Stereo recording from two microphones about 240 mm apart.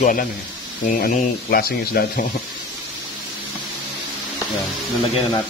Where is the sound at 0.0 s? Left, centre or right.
Left.